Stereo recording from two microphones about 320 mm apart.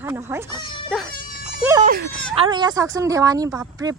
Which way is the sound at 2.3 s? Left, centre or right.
Centre.